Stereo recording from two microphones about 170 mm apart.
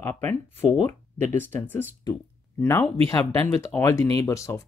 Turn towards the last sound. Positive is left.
turn(degrees=15)  # may be behind; listen again after turning